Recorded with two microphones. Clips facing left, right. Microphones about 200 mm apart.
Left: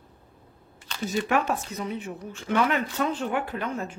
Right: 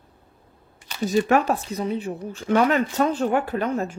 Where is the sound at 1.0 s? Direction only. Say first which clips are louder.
Right 6 dB; 40° right (ahead or behind).